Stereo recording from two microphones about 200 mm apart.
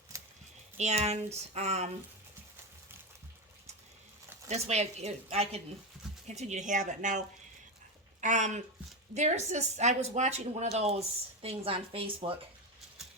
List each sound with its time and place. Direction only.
0.8 s speech: 35° right (ahead or behind)
4.4 s speech: 30° right (ahead or behind)
8.2 s a woman's voice: 35° right (ahead or behind)